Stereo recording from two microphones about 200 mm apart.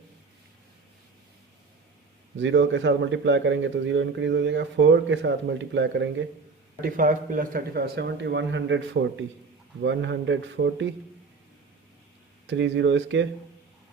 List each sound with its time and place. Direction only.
2.4 s a man's voice: 65° right (ahead or behind)
6.8 s a man's voice: 45° right (ahead or behind); by 10.8 s 65° right (ahead or behind)
12.5 s a man's voice: 65° right (ahead or behind)